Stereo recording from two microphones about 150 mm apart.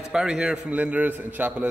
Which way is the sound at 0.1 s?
5° right (ahead or behind).